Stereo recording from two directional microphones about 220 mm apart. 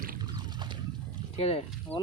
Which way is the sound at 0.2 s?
20° right (ahead or behind).